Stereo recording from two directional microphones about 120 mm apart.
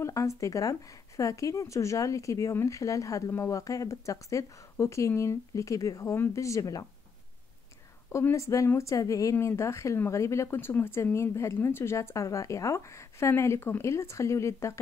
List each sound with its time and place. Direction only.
0.0 s a woman's voice: 25° left (ahead or behind)
8.1 s a woman's voice: 25° left (ahead or behind)